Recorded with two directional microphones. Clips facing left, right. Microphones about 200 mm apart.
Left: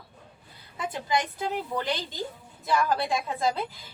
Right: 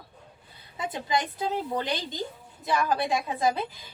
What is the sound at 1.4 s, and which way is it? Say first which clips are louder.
A woman's voice: right 1 dB; 20° right (ahead or behind).